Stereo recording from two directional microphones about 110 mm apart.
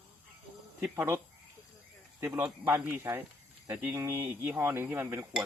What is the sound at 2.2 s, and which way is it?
Speech, 25° right (ahead or behind).